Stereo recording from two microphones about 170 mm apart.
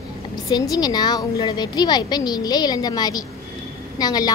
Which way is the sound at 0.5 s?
25° left (ahead or behind).